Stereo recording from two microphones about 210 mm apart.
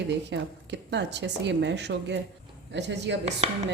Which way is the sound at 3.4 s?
30° right (ahead or behind).